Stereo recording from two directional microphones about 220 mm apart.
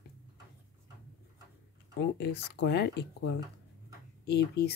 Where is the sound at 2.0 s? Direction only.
50° left (ahead or behind).